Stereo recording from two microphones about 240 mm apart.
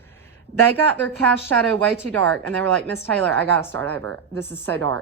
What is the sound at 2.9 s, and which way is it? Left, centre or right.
A woman's voice, centre.